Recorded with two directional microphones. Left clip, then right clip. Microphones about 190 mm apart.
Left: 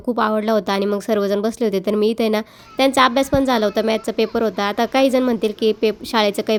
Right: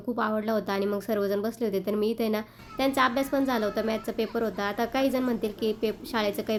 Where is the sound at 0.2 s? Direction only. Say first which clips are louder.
Left 10 dB; 45° left (ahead or behind).